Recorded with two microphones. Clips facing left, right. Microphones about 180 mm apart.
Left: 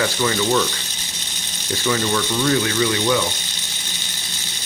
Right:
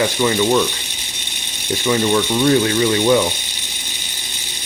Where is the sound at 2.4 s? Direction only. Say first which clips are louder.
Right 4 dB; 30° right (ahead or behind).